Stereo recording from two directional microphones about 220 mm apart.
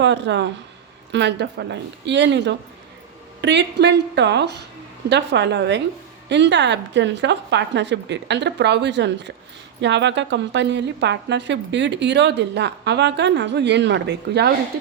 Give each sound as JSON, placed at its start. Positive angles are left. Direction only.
{"t": 0.0, "sound": "a woman's voice", "side_deg": -55}